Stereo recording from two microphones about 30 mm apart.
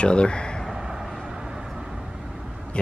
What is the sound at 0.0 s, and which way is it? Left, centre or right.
Speech, left.